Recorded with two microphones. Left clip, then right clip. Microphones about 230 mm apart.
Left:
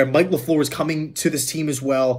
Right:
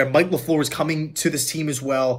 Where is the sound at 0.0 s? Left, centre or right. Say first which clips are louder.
Left 1 dB; centre.